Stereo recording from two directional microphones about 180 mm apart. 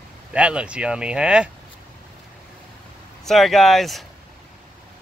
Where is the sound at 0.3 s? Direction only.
5° right (ahead or behind).